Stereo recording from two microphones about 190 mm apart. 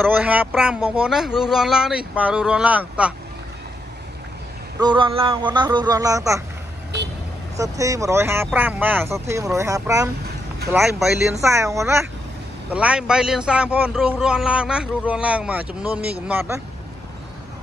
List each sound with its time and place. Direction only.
0.0 s a man's voice: 10° right (ahead or behind)
4.7 s speech: 25° right (ahead or behind)
7.5 s speech: 15° right (ahead or behind)
10.7 s a man's voice: centre (ahead or behind)
11.4 s a man's voice: 15° right (ahead or behind)